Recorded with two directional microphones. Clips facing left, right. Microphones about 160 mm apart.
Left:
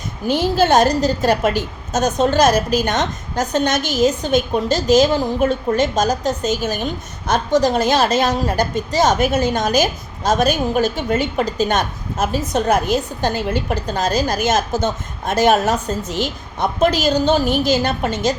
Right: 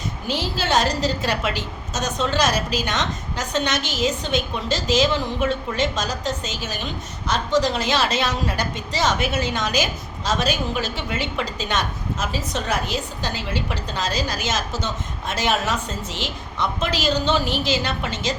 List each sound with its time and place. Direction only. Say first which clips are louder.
0.3 s a woman's voice: left 9 dB; 50° left (ahead or behind)